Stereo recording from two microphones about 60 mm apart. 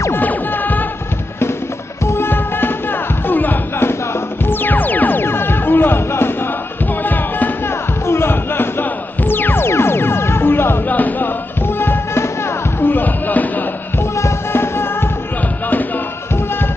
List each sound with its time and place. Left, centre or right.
0.1 s music: left
2.0 s music: left
7.0 s music: left
7.6 s music: left
10.9 s music: left
11.6 s music: left
12.8 s a sound: left
14.1 s music: left